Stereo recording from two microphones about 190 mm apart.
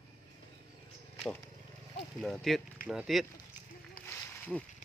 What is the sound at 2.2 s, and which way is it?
Speech, centre (ahead or behind).